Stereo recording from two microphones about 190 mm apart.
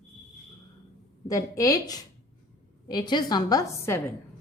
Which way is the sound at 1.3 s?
20° left (ahead or behind).